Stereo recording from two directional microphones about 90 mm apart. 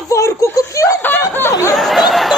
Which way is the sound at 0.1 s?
35° left (ahead or behind).